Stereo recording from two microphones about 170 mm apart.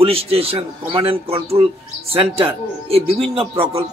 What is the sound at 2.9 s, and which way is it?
Speech, 35° right (ahead or behind).